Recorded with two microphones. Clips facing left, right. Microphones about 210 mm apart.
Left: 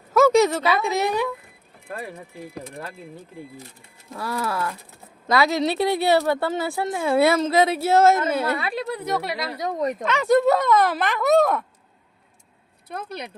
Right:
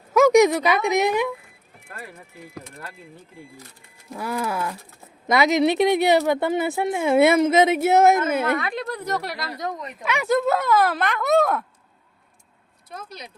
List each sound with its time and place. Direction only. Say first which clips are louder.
0.1 s speech: right 2 dB; 15° right (ahead or behind)
4.1 s speech: right 1 dB; 15° right (ahead or behind)
8.6 s speech: left 1 dB; 5° left (ahead or behind)
9.4 s speech: left 2 dB; 15° left (ahead or behind)
9.7 s speech: left 11 dB; 40° left (ahead or behind)
10.0 s speech: left 2 dB; 10° right (ahead or behind)
10.2 s speech: left 3 dB; centre (ahead or behind)
12.9 s speech: left 5 dB; 60° left (ahead or behind)